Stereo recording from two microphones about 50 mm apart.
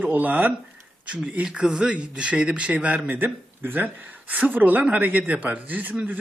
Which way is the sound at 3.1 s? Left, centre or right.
Right.